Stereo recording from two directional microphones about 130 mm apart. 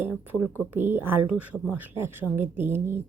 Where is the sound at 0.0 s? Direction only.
15° right (ahead or behind).